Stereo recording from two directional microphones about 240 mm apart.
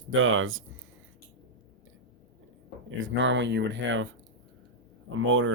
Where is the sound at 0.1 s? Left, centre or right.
Right.